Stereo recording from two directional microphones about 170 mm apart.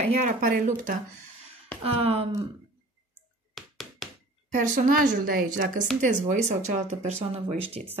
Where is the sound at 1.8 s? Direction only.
35° right (ahead or behind).